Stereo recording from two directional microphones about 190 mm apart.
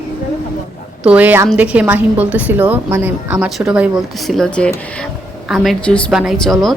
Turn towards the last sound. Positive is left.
turn(degrees=0)  # may be behind; listen again after turning